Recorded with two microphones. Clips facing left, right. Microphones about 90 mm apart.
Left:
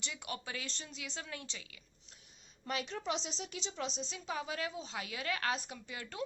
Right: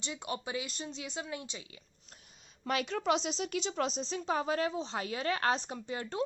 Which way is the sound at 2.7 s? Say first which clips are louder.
Right 7 dB; 75° right (ahead or behind).